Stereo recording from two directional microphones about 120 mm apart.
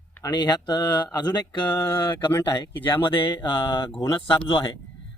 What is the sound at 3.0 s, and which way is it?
Speech, 45° left (ahead or behind).